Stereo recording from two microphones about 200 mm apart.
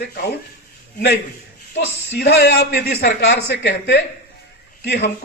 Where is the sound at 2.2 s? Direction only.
55° left (ahead or behind).